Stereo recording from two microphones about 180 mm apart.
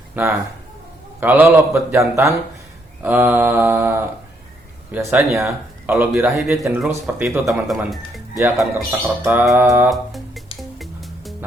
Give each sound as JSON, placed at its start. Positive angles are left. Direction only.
{"t": 0.2, "sound": "speech", "side_deg": -10}
{"t": 7.5, "sound": "speech", "side_deg": 0}
{"t": 8.9, "sound": "speech", "side_deg": -15}
{"t": 9.9, "sound": "music", "side_deg": 0}